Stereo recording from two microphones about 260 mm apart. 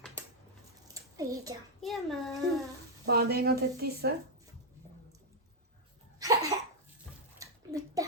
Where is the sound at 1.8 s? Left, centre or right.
Centre.